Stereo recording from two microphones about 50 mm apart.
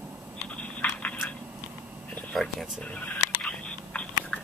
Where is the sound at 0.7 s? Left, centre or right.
Left.